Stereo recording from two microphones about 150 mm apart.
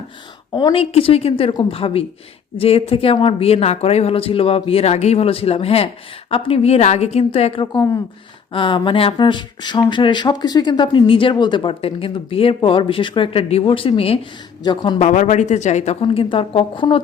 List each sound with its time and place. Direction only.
0.5 s a woman's voice: 35° left (ahead or behind)
14.9 s a woman's voice: 50° left (ahead or behind); by 17.0 s 35° left (ahead or behind)